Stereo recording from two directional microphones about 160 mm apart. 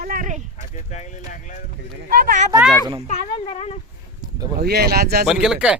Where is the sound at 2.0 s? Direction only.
65° right (ahead or behind).